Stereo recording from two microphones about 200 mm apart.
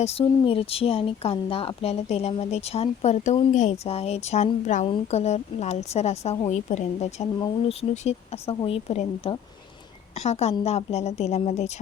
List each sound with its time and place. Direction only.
0.0 s speech: 30° left (ahead or behind)